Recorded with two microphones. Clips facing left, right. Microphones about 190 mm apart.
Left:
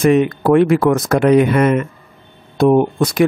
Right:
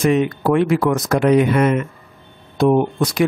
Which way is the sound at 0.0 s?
55° left (ahead or behind).